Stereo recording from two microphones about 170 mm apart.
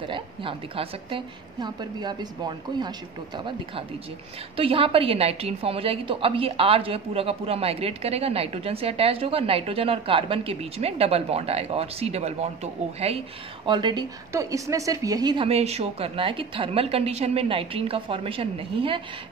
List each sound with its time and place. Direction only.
0.1 s a woman's voice: 30° right (ahead or behind)